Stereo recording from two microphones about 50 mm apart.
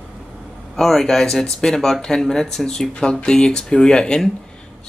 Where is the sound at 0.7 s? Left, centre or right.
Centre.